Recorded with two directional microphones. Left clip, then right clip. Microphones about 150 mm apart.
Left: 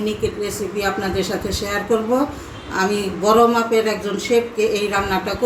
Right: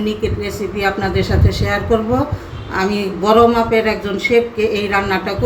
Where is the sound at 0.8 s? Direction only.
5° right (ahead or behind).